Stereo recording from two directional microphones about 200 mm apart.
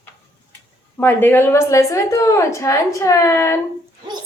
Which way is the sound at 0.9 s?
10° left (ahead or behind).